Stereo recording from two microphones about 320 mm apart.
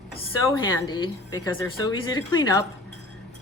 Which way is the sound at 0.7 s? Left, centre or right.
Centre.